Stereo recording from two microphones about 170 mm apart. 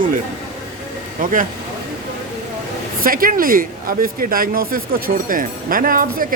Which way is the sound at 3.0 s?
55° right (ahead or behind).